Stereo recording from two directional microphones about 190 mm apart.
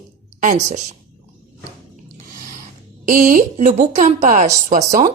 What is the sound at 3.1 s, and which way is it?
Speech, 45° right (ahead or behind).